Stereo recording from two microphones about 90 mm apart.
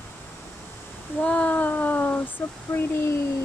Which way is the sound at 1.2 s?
15° left (ahead or behind).